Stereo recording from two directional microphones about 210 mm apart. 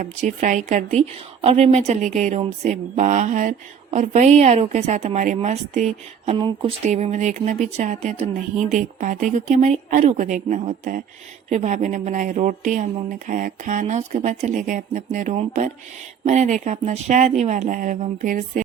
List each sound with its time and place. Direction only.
0.3 s a woman's voice: 35° right (ahead or behind)